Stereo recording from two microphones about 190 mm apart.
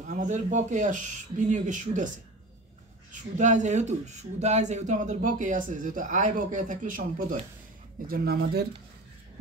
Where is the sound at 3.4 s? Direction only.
40° right (ahead or behind); by 8.7 s 55° right (ahead or behind).